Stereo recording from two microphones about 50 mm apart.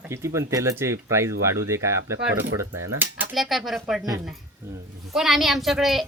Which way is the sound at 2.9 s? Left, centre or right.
Right.